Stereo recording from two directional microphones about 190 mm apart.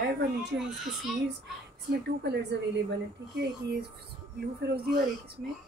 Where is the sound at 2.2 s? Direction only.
60° right (ahead or behind).